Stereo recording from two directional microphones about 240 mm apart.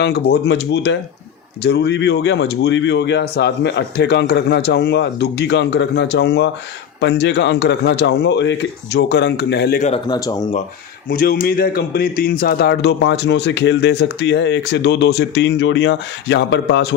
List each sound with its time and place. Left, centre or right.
0.0 s a man's voice: left
9.8 s speech: left
11.1 s a man's voice: left